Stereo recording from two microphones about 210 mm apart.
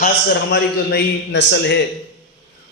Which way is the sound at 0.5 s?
50° left (ahead or behind).